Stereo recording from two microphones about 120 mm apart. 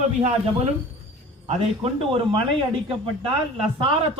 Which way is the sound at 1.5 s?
55° right (ahead or behind).